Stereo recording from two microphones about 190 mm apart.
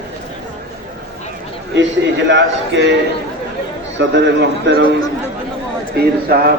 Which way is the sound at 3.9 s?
70° right (ahead or behind).